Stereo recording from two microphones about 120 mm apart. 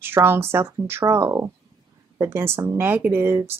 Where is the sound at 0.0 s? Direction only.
20° right (ahead or behind).